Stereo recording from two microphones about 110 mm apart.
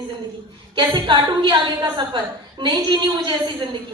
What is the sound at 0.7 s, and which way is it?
A woman's voice, 45° right (ahead or behind).